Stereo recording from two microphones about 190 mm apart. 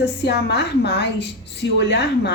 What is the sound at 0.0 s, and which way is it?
A woman's voice, 60° left (ahead or behind).